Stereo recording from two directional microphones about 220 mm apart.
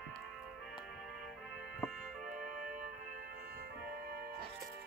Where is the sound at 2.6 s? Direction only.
35° right (ahead or behind).